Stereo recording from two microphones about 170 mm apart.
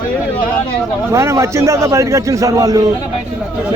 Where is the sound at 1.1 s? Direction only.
15° right (ahead or behind).